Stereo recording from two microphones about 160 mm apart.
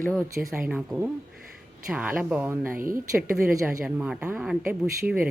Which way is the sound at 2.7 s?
60° right (ahead or behind).